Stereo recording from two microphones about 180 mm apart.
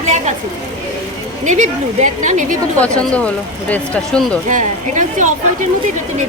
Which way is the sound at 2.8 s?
5° left (ahead or behind).